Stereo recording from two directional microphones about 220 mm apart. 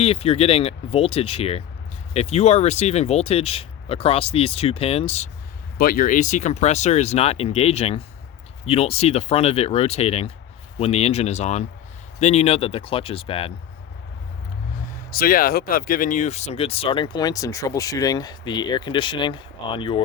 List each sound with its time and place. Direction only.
0.0 s speech: 25° left (ahead or behind)
5.7 s speech: 40° left (ahead or behind); by 13.5 s 25° left (ahead or behind)
15.1 s speech: 40° left (ahead or behind); by 20.0 s 25° left (ahead or behind)